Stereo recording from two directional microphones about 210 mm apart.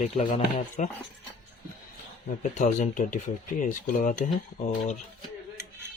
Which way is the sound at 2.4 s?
35° left (ahead or behind).